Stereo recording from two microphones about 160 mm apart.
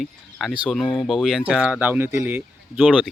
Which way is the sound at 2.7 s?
Centre (ahead or behind).